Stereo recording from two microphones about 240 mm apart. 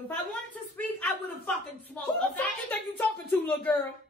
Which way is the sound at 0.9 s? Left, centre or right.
Centre.